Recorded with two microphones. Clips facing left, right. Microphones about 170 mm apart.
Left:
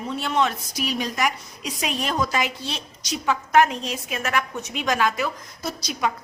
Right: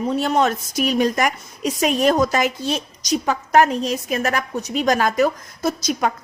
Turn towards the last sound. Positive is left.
turn(degrees=-50)  # may be behind; listen again after turning